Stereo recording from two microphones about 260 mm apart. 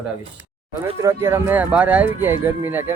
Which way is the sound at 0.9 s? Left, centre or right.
Centre.